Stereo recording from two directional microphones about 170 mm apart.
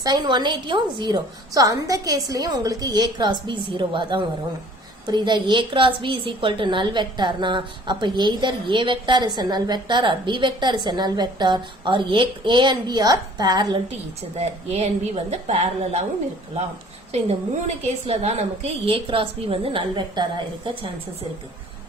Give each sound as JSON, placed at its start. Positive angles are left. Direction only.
{"t": 0.0, "sound": "a woman's voice", "side_deg": -25}
{"t": 14.3, "sound": "a woman's voice", "side_deg": -40}
{"t": 17.1, "sound": "a woman's voice", "side_deg": -40}